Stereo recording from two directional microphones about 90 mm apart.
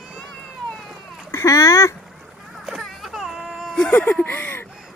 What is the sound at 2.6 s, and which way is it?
Baby cry, centre (ahead or behind).